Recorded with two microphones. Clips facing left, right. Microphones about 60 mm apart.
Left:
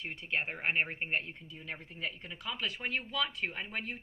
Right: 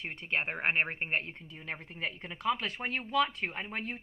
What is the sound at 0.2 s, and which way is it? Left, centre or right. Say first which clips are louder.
Speech: right 3 dB; right.